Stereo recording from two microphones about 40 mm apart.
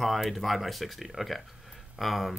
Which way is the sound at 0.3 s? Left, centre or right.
Centre.